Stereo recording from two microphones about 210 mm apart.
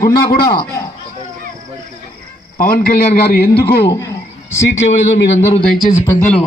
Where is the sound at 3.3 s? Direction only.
50° left (ahead or behind).